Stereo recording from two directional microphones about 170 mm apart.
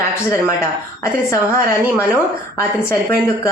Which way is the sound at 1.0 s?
20° left (ahead or behind).